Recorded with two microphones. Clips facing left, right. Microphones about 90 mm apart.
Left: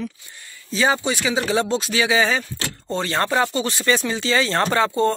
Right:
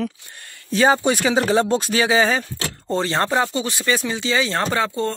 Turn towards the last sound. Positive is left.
turn(degrees=0)  # may be behind; listen again after turning